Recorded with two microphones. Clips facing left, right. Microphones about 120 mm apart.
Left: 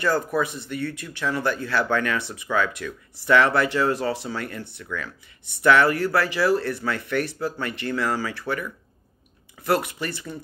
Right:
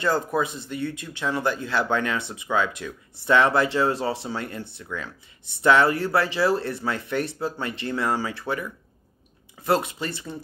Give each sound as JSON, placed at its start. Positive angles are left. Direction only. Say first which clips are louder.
{"t": 0.0, "sound": "speech", "louder": "left 1 dB", "side_deg": -25}